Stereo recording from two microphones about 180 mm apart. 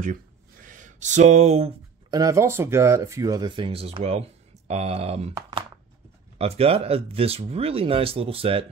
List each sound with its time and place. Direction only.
0.0 s a sound: 45° right (ahead or behind)
2.0 s speech: 20° right (ahead or behind)
6.3 s speech: 35° right (ahead or behind)